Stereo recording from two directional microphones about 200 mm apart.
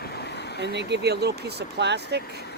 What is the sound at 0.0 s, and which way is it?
Vehicle, 55° left (ahead or behind).